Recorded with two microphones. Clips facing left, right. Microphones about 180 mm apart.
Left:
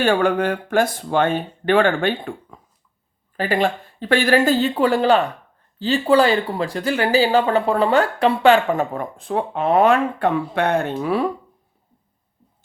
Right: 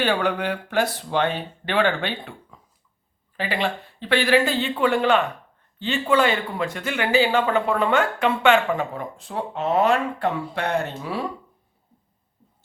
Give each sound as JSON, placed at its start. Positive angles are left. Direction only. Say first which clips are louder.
{"t": 0.0, "sound": "speech", "louder": "left 5 dB", "side_deg": 45}